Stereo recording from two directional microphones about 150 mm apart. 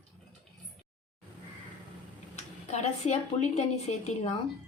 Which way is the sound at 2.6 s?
50° left (ahead or behind).